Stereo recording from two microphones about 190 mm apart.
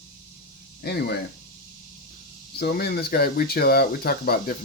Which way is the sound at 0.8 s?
55° left (ahead or behind).